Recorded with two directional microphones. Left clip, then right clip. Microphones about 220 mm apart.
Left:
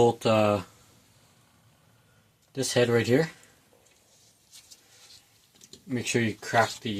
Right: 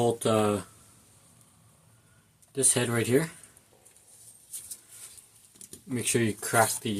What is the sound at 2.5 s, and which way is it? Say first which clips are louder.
Speech: left 4 dB; 20° left (ahead or behind).